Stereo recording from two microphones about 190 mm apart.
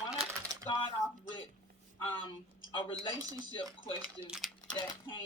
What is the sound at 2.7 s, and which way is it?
Speech, 25° left (ahead or behind).